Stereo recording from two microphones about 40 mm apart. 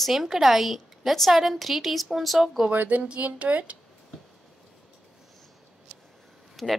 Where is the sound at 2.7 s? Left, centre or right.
Right.